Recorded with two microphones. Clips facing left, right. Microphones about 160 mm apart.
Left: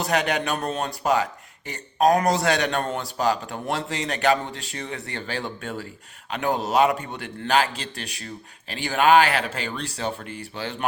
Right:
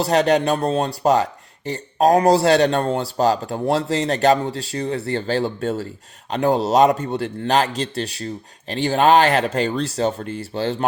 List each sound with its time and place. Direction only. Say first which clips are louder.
0.0 s speech: right 7 dB; 35° right (ahead or behind)